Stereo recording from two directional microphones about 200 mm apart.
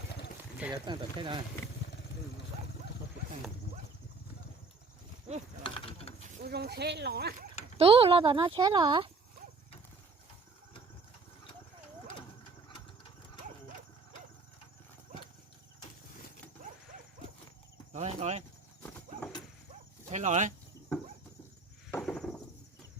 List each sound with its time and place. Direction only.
0.7 s speech: 20° right (ahead or behind)
5.6 s pulleys: 25° left (ahead or behind)
6.2 s speech: 50° right (ahead or behind)
7.8 s speech: 30° right (ahead or behind)
16.6 s dog: 45° right (ahead or behind)
17.9 s a sound: 35° right (ahead or behind)
18.8 s horse: 5° left (ahead or behind)
20.1 s chicken: 35° right (ahead or behind)
22.0 s a sound: 5° left (ahead or behind)